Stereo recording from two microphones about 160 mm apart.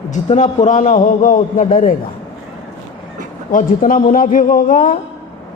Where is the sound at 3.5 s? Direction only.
60° left (ahead or behind).